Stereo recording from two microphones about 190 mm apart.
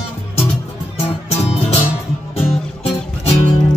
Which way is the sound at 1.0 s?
30° left (ahead or behind).